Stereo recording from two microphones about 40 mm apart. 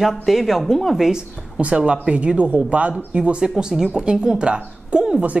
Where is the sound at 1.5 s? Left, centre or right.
Right.